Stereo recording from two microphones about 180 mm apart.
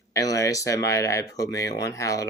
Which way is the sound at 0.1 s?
20° left (ahead or behind).